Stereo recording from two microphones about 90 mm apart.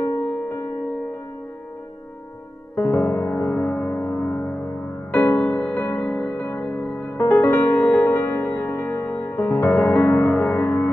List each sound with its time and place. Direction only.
2.7 s music: 20° left (ahead or behind)
7.2 s music: 30° left (ahead or behind)
7.5 s music: 20° left (ahead or behind)